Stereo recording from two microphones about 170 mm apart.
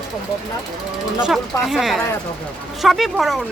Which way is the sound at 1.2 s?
Centre (ahead or behind).